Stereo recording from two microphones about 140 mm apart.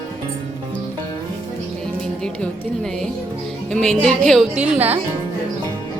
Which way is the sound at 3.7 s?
5° left (ahead or behind).